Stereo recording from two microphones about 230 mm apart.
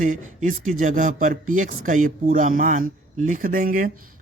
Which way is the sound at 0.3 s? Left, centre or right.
Right.